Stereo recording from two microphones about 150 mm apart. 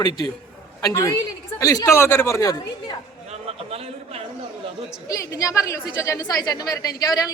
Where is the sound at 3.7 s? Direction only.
40° right (ahead or behind).